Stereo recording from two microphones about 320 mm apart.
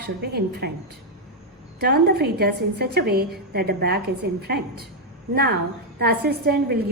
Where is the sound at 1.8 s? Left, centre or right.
Right.